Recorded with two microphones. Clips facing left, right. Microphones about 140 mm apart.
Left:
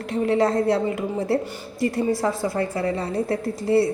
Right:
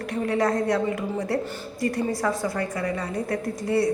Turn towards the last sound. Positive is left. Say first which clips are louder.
# left 4 dB
turn(degrees=30)  # may be behind; listen again after turning